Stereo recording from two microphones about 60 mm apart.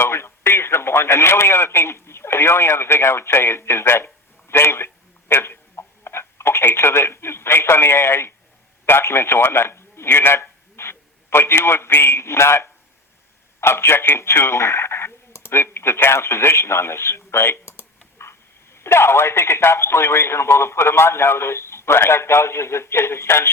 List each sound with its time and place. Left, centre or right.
0.0 s speech: left
5.3 s telephone: left
8.9 s speech: left